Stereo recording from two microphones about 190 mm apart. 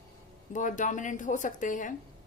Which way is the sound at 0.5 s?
40° left (ahead or behind).